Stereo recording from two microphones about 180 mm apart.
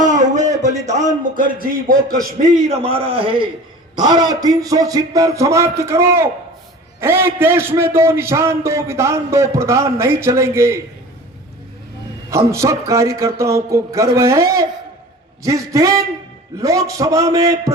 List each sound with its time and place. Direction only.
0.0 s a sound: 45° right (ahead or behind)
0.6 s speech: 40° right (ahead or behind)
2.6 s a man's voice: 35° right (ahead or behind); by 10.8 s 15° right (ahead or behind)
12.3 s a man's voice: 15° right (ahead or behind)